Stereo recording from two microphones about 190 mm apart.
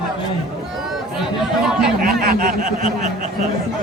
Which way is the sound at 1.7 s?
5° right (ahead or behind).